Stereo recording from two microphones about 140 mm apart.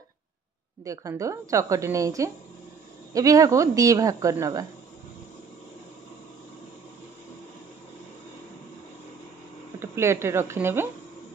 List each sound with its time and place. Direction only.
0.8 s speech: 25° right (ahead or behind)
9.8 s speech: 20° right (ahead or behind)